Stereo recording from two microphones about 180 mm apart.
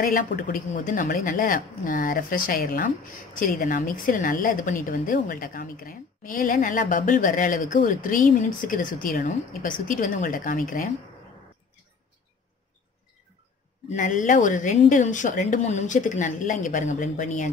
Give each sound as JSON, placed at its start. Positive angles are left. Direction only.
{"t": 0.0, "sound": "a woman's voice", "side_deg": 50}
{"t": 13.9, "sound": "a woman's voice", "side_deg": 45}